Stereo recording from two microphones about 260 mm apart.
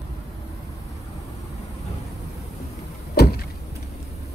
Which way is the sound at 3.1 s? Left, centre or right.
Left.